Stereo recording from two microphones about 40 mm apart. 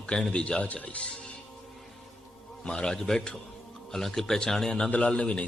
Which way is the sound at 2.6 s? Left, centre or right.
Left.